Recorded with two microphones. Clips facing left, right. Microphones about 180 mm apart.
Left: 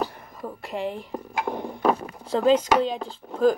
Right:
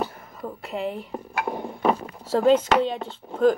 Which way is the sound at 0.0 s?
Centre (ahead or behind).